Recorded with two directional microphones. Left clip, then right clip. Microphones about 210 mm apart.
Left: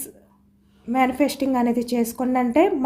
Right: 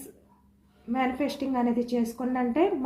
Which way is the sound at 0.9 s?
55° left (ahead or behind).